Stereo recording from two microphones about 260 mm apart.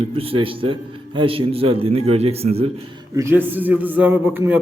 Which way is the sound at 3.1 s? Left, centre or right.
Centre.